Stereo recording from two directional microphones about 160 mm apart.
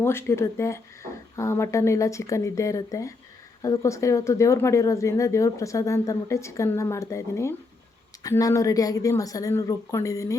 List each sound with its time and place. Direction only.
0.0 s speech: 15° left (ahead or behind)